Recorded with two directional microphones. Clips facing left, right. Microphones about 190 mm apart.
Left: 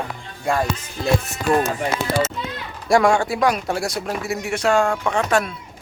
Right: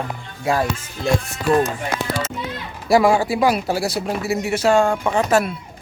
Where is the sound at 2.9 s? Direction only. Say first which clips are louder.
Right 1 dB; 5° right (ahead or behind).